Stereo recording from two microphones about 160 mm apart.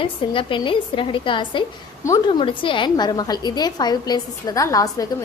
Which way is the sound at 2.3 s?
30° left (ahead or behind).